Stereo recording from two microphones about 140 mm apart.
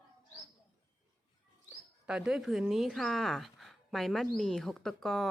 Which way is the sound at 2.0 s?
5° right (ahead or behind).